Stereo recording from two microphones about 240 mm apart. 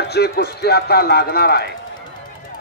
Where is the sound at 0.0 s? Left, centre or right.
Left.